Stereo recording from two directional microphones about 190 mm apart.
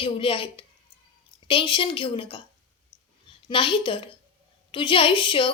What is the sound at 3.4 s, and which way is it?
A woman's voice, 25° left (ahead or behind).